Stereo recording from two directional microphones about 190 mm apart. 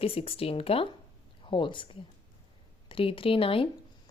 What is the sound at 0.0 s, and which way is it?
Speech, 30° left (ahead or behind).